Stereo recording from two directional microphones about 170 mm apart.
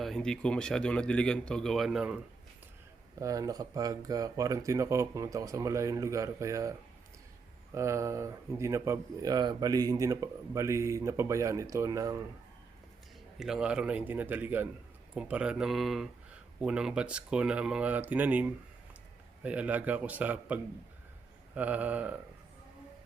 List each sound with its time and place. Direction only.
0.0 s a man's voice: 5° left (ahead or behind)
3.2 s speech: 20° right (ahead or behind)
13.4 s a man's voice: 5° right (ahead or behind)